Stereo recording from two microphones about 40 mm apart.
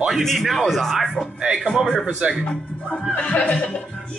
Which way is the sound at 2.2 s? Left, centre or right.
Right.